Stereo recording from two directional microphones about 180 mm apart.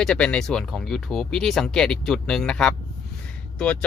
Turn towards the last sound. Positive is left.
turn(degrees=5)  # may be behind; listen again after turning